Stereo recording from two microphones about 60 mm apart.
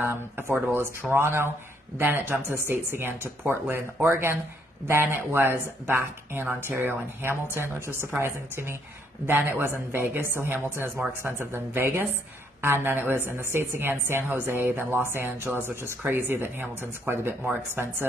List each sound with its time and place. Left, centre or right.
0.0 s speech: right
2.0 s a woman's voice: right